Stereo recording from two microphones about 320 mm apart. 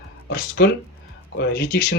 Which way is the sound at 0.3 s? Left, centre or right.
Left.